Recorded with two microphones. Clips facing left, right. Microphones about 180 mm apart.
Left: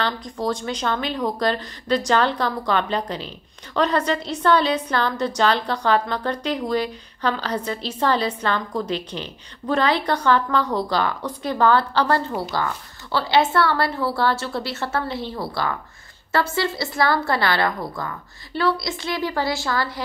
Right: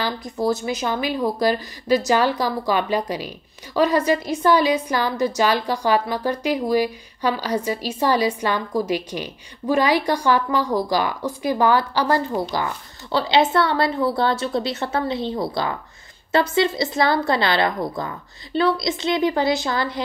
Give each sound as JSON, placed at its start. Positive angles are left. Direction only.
{"t": 0.0, "sound": "a woman's voice", "side_deg": -10}